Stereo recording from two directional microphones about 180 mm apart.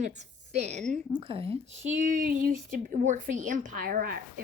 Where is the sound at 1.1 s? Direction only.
30° right (ahead or behind).